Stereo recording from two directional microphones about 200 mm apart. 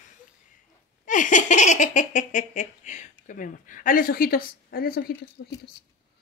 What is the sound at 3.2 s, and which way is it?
A woman's voice, 40° left (ahead or behind).